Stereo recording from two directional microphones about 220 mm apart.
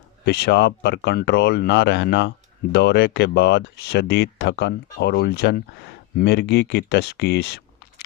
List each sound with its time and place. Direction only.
0.3 s speech: 50° left (ahead or behind)